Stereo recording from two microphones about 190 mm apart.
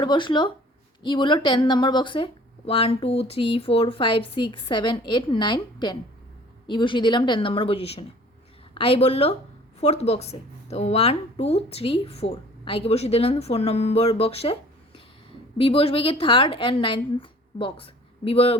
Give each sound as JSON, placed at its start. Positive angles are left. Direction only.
{"t": 0.0, "sound": "a woman's voice", "side_deg": 25}